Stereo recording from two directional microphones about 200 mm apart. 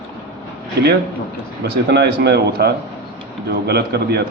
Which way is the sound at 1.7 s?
55° right (ahead or behind).